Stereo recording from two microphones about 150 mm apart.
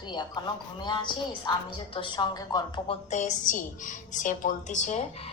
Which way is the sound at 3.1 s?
55° left (ahead or behind).